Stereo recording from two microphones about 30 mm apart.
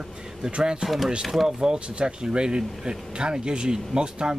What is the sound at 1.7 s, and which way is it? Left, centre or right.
Speech, right.